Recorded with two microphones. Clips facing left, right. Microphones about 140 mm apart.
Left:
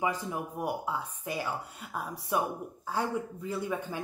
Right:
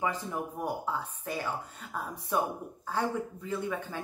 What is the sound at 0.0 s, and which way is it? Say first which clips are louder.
A woman's voice: left 1 dB; 10° left (ahead or behind).